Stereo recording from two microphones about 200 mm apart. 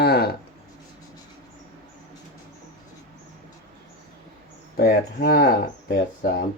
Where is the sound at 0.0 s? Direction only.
55° left (ahead or behind).